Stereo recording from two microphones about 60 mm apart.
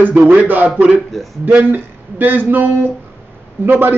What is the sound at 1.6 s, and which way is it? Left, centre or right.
A man's voice, right.